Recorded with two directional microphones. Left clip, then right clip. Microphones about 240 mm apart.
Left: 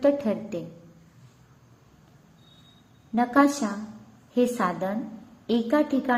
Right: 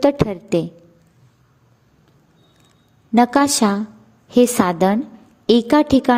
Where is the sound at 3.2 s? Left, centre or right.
Right.